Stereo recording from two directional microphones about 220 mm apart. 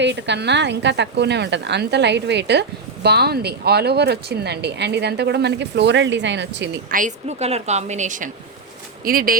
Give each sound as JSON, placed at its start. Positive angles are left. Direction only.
{"t": 0.0, "sound": "a woman's voice", "side_deg": -50}
{"t": 7.0, "sound": "a woman's voice", "side_deg": -30}